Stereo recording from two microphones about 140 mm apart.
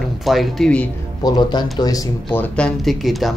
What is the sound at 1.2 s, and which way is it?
Speech, 30° left (ahead or behind).